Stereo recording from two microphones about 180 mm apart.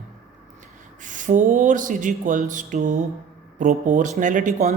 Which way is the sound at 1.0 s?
45° right (ahead or behind).